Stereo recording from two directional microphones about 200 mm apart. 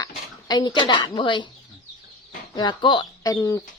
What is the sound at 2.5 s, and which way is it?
Speech, 20° left (ahead or behind).